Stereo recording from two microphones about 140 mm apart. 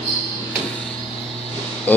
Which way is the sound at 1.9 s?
10° left (ahead or behind).